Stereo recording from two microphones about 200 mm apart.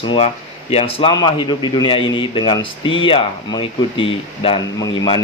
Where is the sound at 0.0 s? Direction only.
25° left (ahead or behind).